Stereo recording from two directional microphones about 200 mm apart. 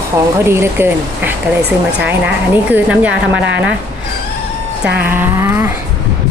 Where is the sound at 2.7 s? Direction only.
5° right (ahead or behind).